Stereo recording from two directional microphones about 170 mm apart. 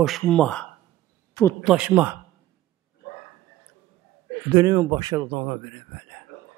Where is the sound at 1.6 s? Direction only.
10° right (ahead or behind).